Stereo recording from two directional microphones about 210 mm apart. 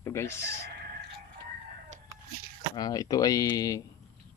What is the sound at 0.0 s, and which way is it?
Speech, 15° left (ahead or behind).